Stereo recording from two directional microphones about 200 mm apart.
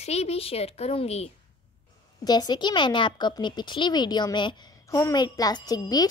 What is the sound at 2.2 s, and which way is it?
Speech, 20° left (ahead or behind).